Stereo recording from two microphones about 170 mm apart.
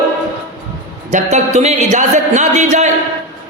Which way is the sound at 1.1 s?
40° right (ahead or behind).